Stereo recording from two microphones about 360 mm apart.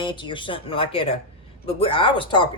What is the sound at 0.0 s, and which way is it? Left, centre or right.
Speech, centre.